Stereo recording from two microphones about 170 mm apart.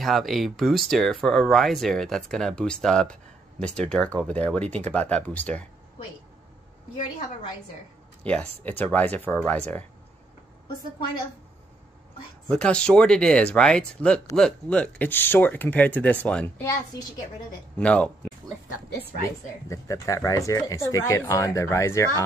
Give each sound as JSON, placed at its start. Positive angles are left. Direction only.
{"t": 0.0, "sound": "speech", "side_deg": 0}
{"t": 8.2, "sound": "speech", "side_deg": 5}
{"t": 12.4, "sound": "speech", "side_deg": 5}
{"t": 17.7, "sound": "speech", "side_deg": 5}
{"t": 19.7, "sound": "speech", "side_deg": 20}